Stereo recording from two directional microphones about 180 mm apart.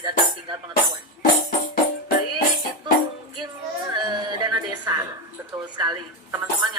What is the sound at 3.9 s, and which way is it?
Music, 25° right (ahead or behind).